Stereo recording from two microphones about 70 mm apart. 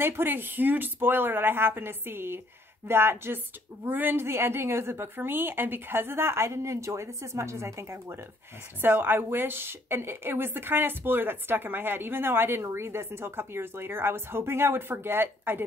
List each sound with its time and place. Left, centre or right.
0.0 s a woman's voice: right
8.8 s a woman's voice: right